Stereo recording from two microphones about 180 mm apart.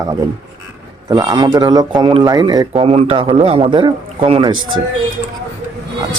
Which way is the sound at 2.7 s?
35° right (ahead or behind).